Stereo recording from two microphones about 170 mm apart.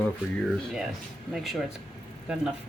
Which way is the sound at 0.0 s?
Centre (ahead or behind).